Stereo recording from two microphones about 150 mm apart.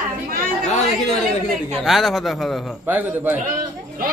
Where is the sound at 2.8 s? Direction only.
15° right (ahead or behind).